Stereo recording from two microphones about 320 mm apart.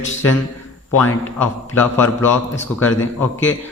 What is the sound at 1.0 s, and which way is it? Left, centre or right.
A man's voice, centre.